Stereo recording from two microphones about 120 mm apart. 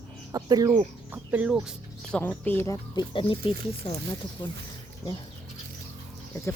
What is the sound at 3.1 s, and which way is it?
Speech, 50° left (ahead or behind).